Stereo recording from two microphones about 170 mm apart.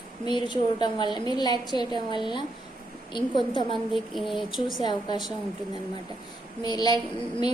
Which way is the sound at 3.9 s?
Centre (ahead or behind).